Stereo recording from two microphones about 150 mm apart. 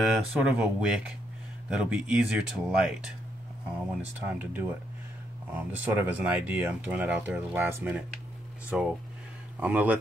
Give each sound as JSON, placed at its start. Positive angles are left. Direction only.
{"t": 0.0, "sound": "speech", "side_deg": -5}
{"t": 4.0, "sound": "speech", "side_deg": -10}